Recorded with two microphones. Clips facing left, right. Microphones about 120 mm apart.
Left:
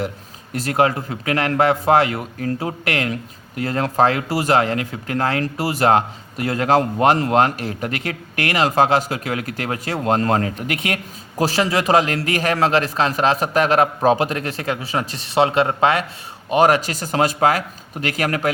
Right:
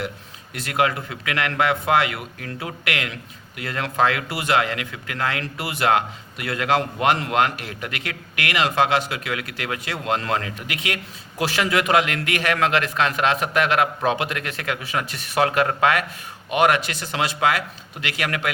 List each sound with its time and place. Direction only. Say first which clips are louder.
0.5 s speech: left 4 dB; 40° left (ahead or behind)